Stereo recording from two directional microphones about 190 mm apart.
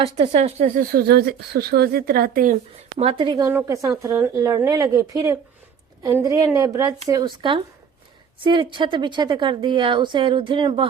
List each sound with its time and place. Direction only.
0.0 s a woman's voice: 30° right (ahead or behind)
0.6 s a woman's voice: 50° right (ahead or behind)
3.0 s a woman's voice: 30° right (ahead or behind)